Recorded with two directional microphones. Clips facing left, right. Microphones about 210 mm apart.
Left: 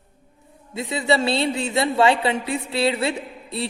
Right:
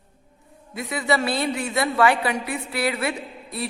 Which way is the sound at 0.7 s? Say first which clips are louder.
Left 2 dB; 25° left (ahead or behind).